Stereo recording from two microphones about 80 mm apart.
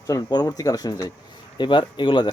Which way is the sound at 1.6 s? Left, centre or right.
Left.